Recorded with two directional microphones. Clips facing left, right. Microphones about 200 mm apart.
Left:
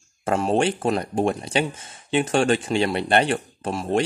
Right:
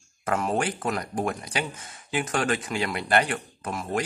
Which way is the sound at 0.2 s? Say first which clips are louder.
Left 5 dB; 30° left (ahead or behind).